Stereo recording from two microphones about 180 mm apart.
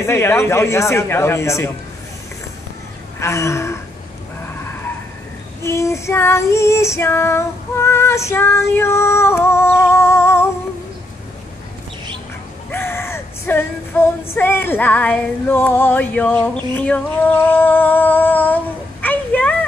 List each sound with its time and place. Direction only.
0.0 s female singing: 15° left (ahead or behind)
3.2 s female singing: 15° left (ahead or behind)
5.6 s female singing: 15° left (ahead or behind)
12.7 s female singing: 15° left (ahead or behind)
17.5 s humming: 10° left (ahead or behind)